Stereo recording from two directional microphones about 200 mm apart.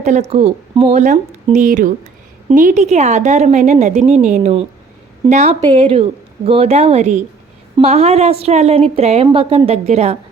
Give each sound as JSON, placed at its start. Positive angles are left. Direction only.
{"t": 0.0, "sound": "a woman's voice", "side_deg": -35}
{"t": 5.5, "sound": "a woman's voice", "side_deg": -25}